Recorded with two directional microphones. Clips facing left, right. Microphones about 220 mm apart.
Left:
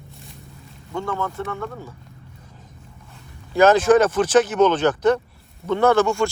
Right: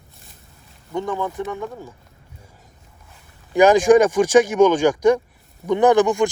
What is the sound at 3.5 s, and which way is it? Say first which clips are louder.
Speech: right 2 dB; 15° right (ahead or behind).